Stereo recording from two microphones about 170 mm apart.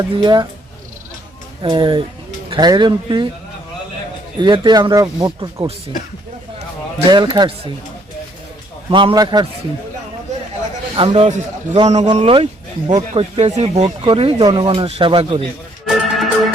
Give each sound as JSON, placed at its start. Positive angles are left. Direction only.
{"t": 0.2, "sound": "speech", "side_deg": -25}
{"t": 1.6, "sound": "speech", "side_deg": -30}
{"t": 4.4, "sound": "speech", "side_deg": -25}
{"t": 7.1, "sound": "speech", "side_deg": -25}
{"t": 8.9, "sound": "speech", "side_deg": -30}
{"t": 10.9, "sound": "speech", "side_deg": -30}
{"t": 15.9, "sound": "music", "side_deg": 0}